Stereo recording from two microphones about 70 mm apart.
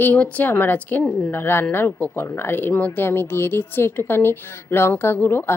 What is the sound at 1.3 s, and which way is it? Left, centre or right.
A woman's voice, left.